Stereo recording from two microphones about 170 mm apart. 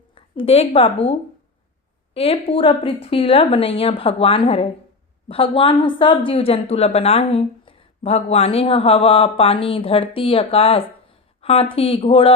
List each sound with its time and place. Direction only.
0.1 s a woman's voice: 35° left (ahead or behind)
2.1 s a woman's voice: 35° left (ahead or behind)